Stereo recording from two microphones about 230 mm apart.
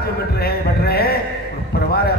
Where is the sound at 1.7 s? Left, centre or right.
Left.